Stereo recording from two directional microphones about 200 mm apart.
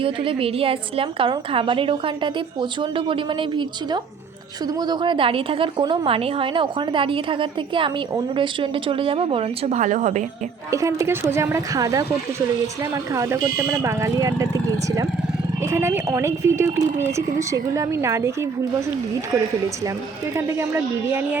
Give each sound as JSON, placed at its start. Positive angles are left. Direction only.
{"t": 0.0, "sound": "a woman's voice", "side_deg": -25}
{"t": 10.7, "sound": "speech", "side_deg": -15}
{"t": 20.3, "sound": "speech", "side_deg": -15}